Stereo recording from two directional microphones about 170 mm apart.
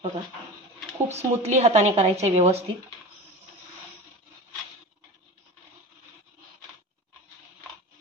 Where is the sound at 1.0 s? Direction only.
40° right (ahead or behind).